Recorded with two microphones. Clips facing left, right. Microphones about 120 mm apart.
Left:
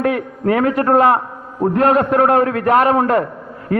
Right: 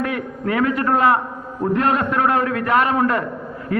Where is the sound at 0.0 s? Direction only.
40° left (ahead or behind).